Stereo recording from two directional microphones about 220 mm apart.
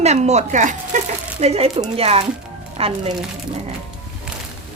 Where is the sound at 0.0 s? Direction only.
30° right (ahead or behind).